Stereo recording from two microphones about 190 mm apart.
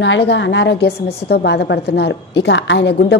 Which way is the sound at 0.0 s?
65° left (ahead or behind).